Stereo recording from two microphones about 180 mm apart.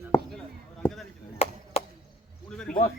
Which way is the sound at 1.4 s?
35° left (ahead or behind).